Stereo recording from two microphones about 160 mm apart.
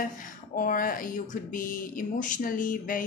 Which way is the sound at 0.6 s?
60° left (ahead or behind).